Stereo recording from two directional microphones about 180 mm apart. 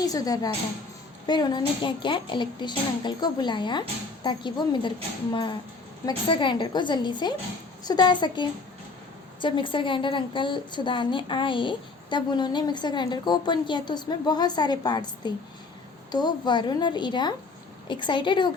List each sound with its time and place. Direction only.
0.0 s a woman's voice: 20° left (ahead or behind)